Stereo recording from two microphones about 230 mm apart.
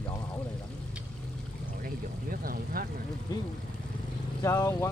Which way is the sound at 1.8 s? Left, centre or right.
Right.